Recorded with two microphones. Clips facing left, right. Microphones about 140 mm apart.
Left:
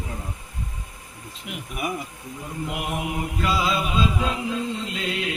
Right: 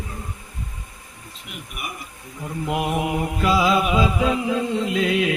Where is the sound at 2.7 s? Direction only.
70° right (ahead or behind).